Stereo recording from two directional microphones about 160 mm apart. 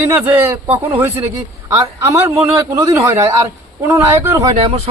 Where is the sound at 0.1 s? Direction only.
10° right (ahead or behind).